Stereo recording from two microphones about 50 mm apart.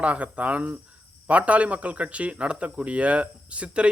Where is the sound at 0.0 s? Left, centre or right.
Right.